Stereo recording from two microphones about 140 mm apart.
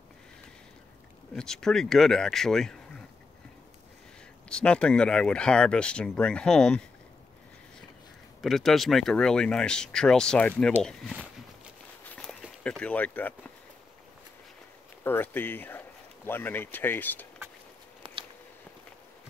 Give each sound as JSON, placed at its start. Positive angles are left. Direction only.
{"t": 1.3, "sound": "speech", "side_deg": 5}
{"t": 4.5, "sound": "speech", "side_deg": 5}
{"t": 8.4, "sound": "speech", "side_deg": 0}
{"t": 12.2, "sound": "a sound", "side_deg": 5}
{"t": 15.0, "sound": "speech", "side_deg": 15}
{"t": 18.0, "sound": "biting", "side_deg": -35}